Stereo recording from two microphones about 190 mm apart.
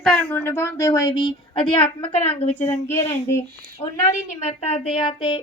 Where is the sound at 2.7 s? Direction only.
15° left (ahead or behind).